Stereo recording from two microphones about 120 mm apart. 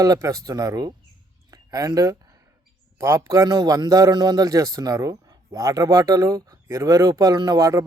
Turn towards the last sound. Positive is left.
turn(degrees=-30)  # may be behind; listen again after turning